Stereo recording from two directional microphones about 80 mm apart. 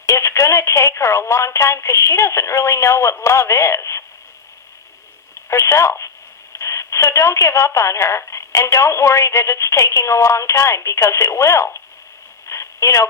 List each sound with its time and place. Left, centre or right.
0.0 s speech: left
5.5 s speech: left
12.5 s a sound: left